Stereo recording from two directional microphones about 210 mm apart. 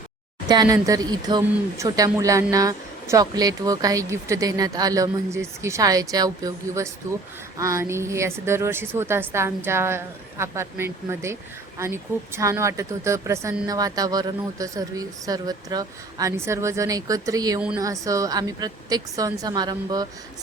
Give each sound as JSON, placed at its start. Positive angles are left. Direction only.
{"t": 0.4, "sound": "speech", "side_deg": -20}
{"t": 17.6, "sound": "speech", "side_deg": -5}
{"t": 17.8, "sound": "speech", "side_deg": -15}